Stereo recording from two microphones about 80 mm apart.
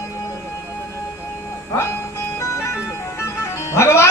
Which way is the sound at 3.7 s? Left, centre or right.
Left.